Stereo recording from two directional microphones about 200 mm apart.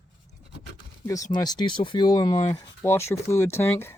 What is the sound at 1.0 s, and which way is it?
Speech, 15° left (ahead or behind).